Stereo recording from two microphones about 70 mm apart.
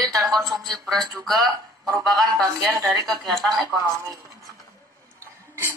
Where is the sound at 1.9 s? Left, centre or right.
Right.